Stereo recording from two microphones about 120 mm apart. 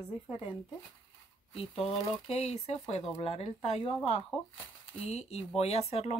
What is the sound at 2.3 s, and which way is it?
Speech, 60° left (ahead or behind).